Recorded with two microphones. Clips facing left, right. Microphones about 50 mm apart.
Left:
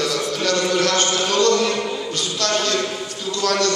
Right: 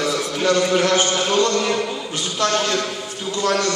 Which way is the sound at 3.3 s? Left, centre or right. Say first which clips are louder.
Even; centre.